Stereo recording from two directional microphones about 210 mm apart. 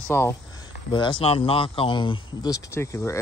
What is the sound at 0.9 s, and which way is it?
Speech, 20° left (ahead or behind).